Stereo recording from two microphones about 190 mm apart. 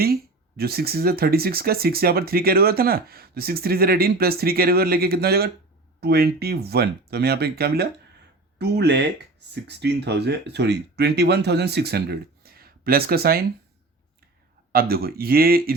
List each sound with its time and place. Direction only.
0.0 s speech: 55° right (ahead or behind)
14.7 s speech: 50° right (ahead or behind)